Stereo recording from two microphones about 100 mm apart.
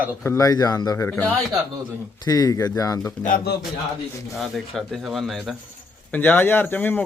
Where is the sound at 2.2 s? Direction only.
40° left (ahead or behind).